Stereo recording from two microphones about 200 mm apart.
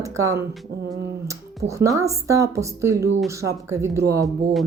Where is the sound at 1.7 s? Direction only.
15° right (ahead or behind).